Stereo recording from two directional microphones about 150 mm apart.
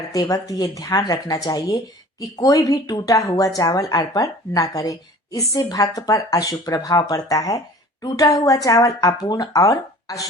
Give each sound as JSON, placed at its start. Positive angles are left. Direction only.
{"t": 0.1, "sound": "speech", "side_deg": 25}